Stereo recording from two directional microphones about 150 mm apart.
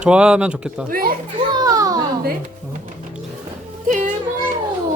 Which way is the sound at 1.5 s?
25° right (ahead or behind).